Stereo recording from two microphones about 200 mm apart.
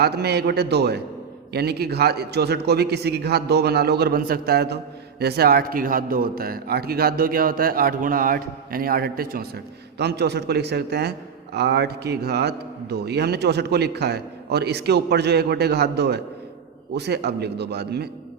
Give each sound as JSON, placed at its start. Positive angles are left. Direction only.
{"t": 0.0, "sound": "a man's voice", "side_deg": -55}